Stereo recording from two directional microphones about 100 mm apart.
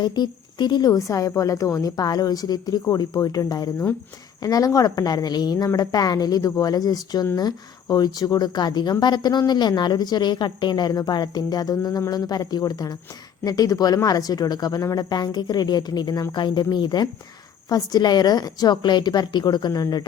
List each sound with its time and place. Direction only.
0.0 s a woman's voice: 50° left (ahead or behind)